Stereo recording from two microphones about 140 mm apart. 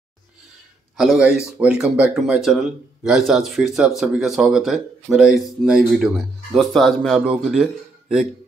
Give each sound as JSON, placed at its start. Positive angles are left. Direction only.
{"t": 0.9, "sound": "speech", "side_deg": -5}